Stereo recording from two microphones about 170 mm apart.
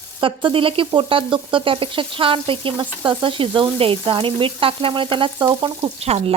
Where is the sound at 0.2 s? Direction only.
30° right (ahead or behind).